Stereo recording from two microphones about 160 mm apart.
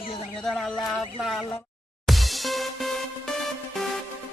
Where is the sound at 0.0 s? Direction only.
35° left (ahead or behind).